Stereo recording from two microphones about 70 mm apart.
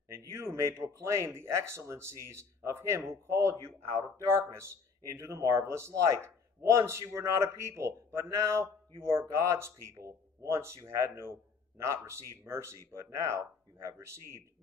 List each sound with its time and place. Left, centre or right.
0.1 s a man's voice: right